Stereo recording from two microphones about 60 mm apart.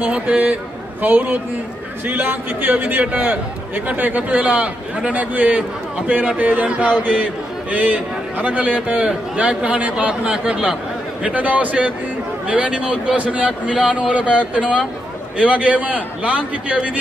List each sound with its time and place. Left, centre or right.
0.0 s a man's voice: right